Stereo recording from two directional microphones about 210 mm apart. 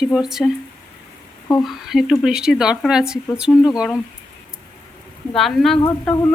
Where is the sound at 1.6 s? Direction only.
Centre (ahead or behind).